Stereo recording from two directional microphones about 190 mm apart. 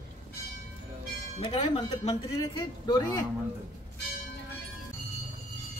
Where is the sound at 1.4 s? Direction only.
30° left (ahead or behind).